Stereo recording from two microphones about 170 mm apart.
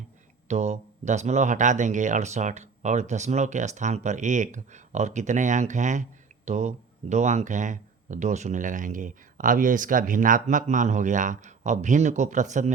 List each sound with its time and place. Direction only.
0.4 s speech: 40° right (ahead or behind)